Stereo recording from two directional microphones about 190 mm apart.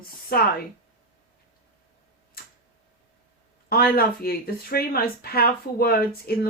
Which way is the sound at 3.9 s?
50° left (ahead or behind).